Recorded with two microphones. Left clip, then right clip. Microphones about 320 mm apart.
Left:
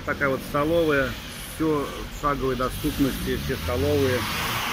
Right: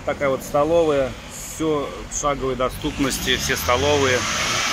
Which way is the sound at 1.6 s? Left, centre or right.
Centre.